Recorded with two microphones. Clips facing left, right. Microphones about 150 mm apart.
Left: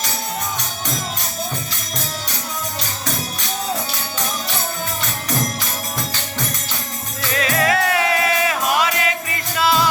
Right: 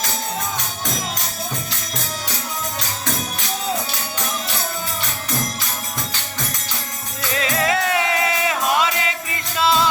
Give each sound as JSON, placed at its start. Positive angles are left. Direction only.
{"t": 7.3, "sound": "music", "side_deg": -20}